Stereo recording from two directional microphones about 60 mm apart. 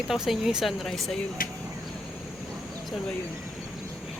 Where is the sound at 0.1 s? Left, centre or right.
Centre.